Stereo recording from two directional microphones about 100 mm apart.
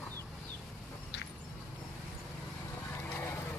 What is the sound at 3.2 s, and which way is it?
Vehicle, 20° left (ahead or behind).